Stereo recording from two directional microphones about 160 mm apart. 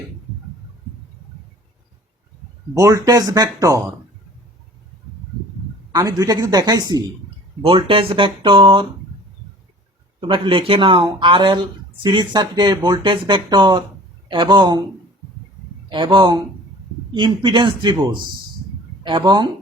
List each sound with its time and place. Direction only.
2.7 s speech: 20° right (ahead or behind)
5.9 s speech: 25° right (ahead or behind)
10.2 s speech: 30° right (ahead or behind)
15.9 s speech: 30° right (ahead or behind)